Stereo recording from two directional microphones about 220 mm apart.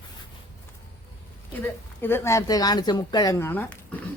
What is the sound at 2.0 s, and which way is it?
A woman's voice, 10° left (ahead or behind).